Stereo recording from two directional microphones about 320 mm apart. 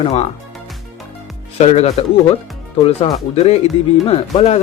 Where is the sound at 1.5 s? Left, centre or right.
Centre.